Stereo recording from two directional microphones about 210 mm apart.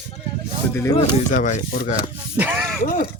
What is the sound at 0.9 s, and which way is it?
Speech, 35° left (ahead or behind).